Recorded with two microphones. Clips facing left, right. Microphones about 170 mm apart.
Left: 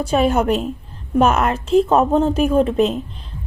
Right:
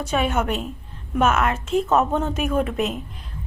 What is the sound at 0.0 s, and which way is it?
A woman's voice, 35° left (ahead or behind).